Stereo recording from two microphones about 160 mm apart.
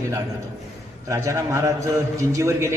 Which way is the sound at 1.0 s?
20° right (ahead or behind).